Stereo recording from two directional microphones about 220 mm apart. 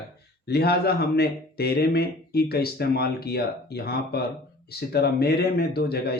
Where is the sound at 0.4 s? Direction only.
45° left (ahead or behind).